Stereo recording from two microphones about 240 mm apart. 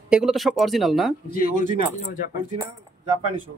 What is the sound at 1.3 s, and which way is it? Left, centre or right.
Speech, left.